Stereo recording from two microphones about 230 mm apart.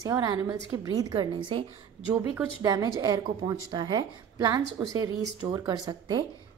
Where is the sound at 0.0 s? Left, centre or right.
Centre.